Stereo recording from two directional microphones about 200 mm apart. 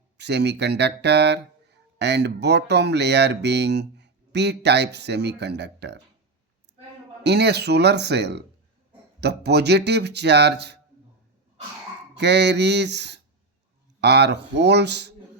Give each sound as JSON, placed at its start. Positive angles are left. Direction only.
{"t": 0.2, "sound": "speech", "side_deg": -60}
{"t": 7.3, "sound": "speech", "side_deg": -55}
{"t": 12.1, "sound": "speech", "side_deg": -60}